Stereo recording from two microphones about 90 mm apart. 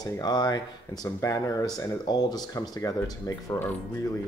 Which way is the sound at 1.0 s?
35° left (ahead or behind).